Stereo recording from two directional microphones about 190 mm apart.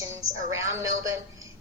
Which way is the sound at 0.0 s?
15° right (ahead or behind).